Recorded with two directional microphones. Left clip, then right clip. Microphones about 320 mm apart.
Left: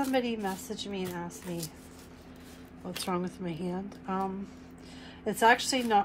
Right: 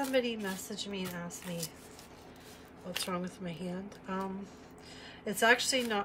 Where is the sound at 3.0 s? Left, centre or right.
Centre.